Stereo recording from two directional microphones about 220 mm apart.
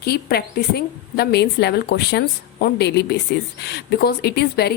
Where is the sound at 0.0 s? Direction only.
45° left (ahead or behind).